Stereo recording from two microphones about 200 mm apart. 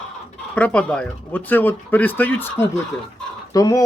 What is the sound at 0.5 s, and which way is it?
Speech, 5° left (ahead or behind).